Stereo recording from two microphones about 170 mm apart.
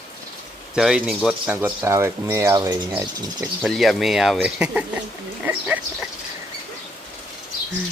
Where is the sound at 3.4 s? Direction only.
Centre (ahead or behind).